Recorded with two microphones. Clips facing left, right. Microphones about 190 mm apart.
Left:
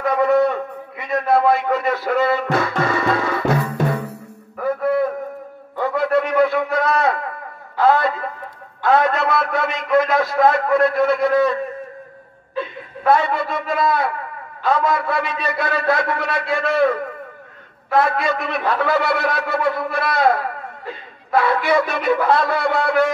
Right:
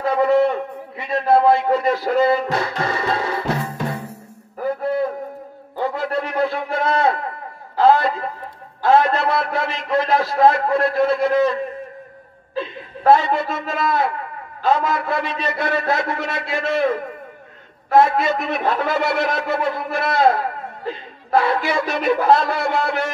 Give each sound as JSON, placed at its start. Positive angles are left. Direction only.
{"t": 0.0, "sound": "a man's voice", "side_deg": -30}
{"t": 3.3, "sound": "music", "side_deg": -30}
{"t": 4.6, "sound": "a sound", "side_deg": -30}
{"t": 5.8, "sound": "a man's voice", "side_deg": -30}